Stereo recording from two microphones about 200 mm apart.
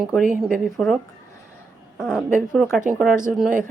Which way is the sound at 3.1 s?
40° right (ahead or behind).